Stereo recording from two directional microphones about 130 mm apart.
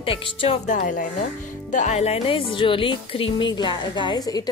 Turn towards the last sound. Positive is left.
turn(degrees=30)  # may be behind; listen again after turning